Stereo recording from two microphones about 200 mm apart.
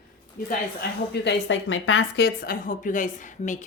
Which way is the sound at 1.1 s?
60° left (ahead or behind).